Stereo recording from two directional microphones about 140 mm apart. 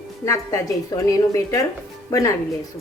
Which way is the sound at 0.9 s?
25° left (ahead or behind).